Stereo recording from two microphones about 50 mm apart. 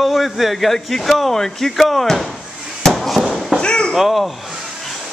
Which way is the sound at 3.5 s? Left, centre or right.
Centre.